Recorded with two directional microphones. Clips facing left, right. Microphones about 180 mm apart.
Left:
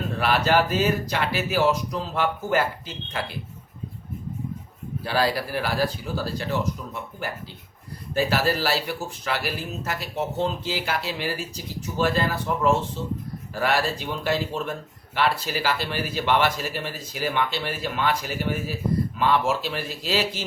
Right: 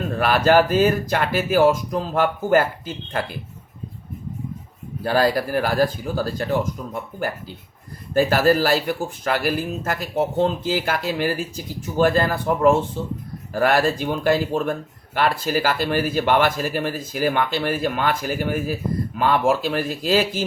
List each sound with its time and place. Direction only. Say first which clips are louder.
0.2 s speech: right 5 dB; 50° right (ahead or behind)
5.0 s speech: right 5 dB; 45° right (ahead or behind)